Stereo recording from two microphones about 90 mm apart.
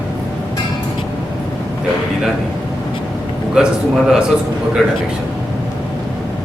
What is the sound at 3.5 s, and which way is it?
A man's voice, 5° right (ahead or behind).